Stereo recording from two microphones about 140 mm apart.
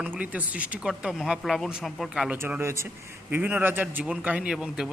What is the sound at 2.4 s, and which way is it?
Speech, 15° right (ahead or behind).